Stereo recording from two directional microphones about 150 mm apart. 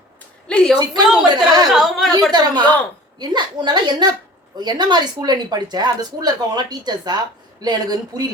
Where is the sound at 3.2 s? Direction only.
30° right (ahead or behind).